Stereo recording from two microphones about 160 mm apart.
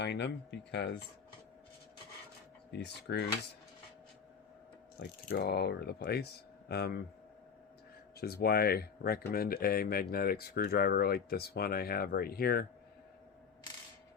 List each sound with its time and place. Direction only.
0.0 s speech: 90° left
2.7 s speech: 90° left
4.9 s speech: 80° left
8.2 s speech: 75° left (ahead or behind)